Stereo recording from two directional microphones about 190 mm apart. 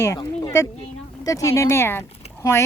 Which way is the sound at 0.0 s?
20° left (ahead or behind).